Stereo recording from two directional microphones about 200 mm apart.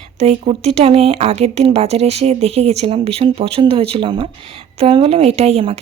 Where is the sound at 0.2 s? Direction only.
30° right (ahead or behind).